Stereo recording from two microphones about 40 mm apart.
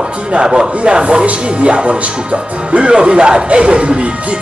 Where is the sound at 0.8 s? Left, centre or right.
Right.